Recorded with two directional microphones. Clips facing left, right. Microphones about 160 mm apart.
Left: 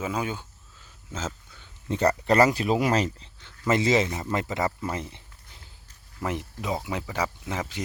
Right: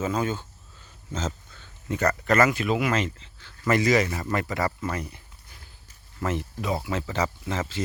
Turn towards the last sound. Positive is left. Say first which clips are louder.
# right 2 dB
turn(degrees=15)  # may be behind; listen again after turning